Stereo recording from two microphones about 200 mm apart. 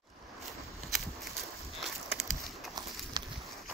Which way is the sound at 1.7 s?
Centre (ahead or behind).